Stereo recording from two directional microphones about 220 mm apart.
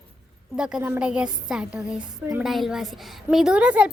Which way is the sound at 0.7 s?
10° right (ahead or behind).